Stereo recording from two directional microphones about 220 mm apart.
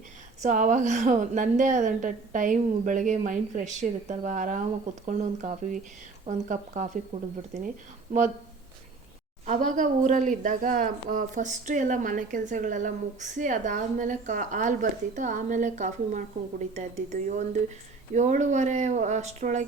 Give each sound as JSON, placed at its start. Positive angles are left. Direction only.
{"t": 0.4, "sound": "a woman's voice", "side_deg": -35}
{"t": 9.5, "sound": "a woman's voice", "side_deg": -35}